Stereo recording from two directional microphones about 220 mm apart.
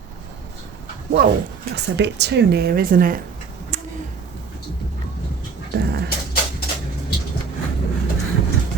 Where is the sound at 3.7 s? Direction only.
35° right (ahead or behind).